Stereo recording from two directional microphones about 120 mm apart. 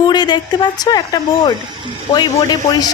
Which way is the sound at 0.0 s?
35° left (ahead or behind).